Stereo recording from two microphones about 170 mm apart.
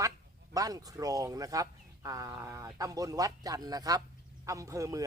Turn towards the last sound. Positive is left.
turn(degrees=-20)  # may be behind; listen again after turning